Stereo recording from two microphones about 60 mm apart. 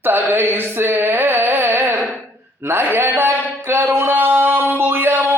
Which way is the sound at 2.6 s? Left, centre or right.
Right.